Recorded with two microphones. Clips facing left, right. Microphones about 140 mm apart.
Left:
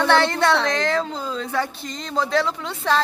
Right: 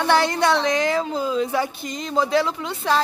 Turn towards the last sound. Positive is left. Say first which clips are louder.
# even
turn(degrees=-5)  # may be behind; listen again after turning